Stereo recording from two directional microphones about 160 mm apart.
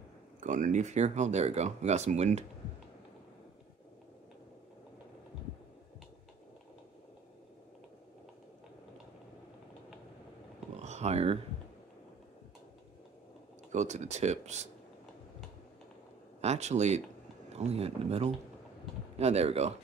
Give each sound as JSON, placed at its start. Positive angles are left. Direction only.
{"t": 0.4, "sound": "speech", "side_deg": -50}
{"t": 10.8, "sound": "a sound", "side_deg": -45}
{"t": 13.7, "sound": "speech", "side_deg": -45}
{"t": 16.3, "sound": "speech", "side_deg": -45}